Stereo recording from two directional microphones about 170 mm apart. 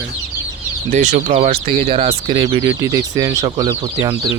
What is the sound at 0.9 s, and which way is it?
Speech, 45° right (ahead or behind).